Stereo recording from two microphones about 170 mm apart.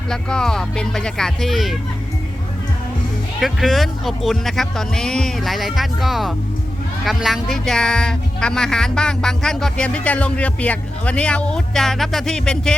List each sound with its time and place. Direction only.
0.1 s speech: 5° left (ahead or behind)
3.4 s speech: centre (ahead or behind)